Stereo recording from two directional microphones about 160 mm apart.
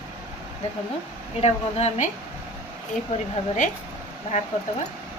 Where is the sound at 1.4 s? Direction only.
40° left (ahead or behind).